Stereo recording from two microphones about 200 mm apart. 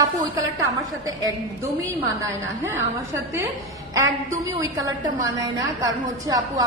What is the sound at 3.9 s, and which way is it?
A woman's voice, 15° right (ahead or behind).